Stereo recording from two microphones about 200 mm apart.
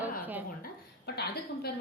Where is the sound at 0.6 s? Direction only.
50° left (ahead or behind).